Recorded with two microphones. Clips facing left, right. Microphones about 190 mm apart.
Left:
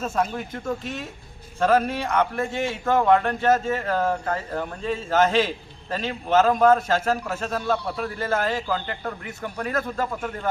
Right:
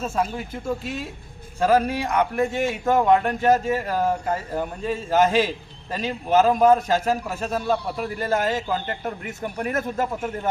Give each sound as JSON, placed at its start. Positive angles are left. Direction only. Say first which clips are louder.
{"t": 0.0, "sound": "a man's voice", "louder": "even", "side_deg": -5}